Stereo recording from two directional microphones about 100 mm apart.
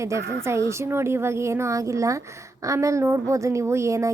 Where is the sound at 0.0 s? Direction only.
30° right (ahead or behind).